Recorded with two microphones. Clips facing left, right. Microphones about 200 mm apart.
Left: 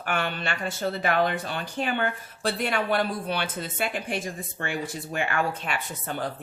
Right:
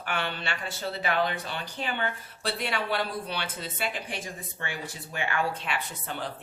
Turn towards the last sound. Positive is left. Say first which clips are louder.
# left 3 dB
turn(degrees=45)  # may be behind; listen again after turning